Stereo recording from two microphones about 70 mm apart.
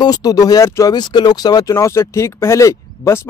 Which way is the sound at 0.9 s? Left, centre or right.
Left.